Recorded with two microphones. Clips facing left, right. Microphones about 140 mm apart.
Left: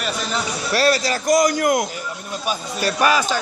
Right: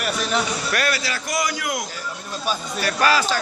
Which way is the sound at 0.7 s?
35° left (ahead or behind).